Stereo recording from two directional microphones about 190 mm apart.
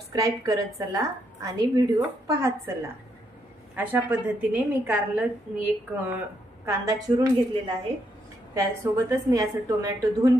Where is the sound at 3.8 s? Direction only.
10° right (ahead or behind).